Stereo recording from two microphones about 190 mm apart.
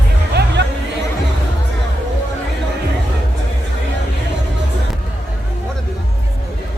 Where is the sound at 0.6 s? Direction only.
65° right (ahead or behind).